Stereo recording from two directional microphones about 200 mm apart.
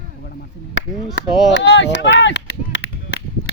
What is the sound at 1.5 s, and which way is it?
Whip, 65° left (ahead or behind).